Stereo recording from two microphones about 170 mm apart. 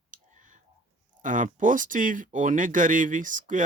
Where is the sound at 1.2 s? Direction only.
50° right (ahead or behind).